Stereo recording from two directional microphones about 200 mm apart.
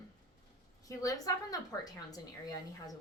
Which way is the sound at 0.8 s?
15° left (ahead or behind).